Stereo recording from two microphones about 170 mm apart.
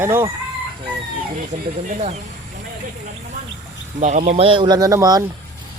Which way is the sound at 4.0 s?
45° right (ahead or behind).